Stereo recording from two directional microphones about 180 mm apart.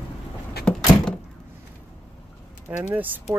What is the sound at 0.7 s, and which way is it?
Door, 5° left (ahead or behind).